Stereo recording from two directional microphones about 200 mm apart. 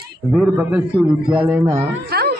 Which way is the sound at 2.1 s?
50° right (ahead or behind).